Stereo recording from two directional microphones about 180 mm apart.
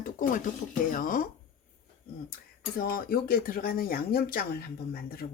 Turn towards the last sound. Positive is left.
turn(degrees=55)  # may be behind; listen again after turning